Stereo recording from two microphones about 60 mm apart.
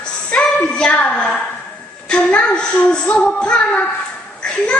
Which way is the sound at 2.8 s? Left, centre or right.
Left.